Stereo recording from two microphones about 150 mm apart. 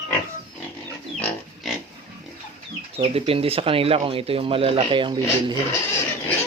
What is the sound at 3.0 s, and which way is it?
Speech, 40° right (ahead or behind).